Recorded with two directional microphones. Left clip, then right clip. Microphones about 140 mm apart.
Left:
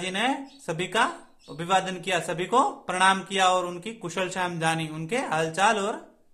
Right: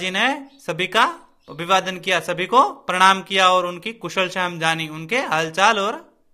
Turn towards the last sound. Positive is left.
turn(degrees=-10)  # may be behind; listen again after turning